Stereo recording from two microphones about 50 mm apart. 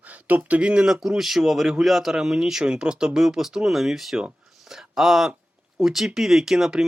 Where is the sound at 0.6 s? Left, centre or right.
Right.